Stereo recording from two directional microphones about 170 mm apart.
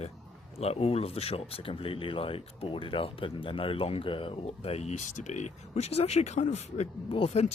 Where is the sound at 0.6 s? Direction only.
35° left (ahead or behind).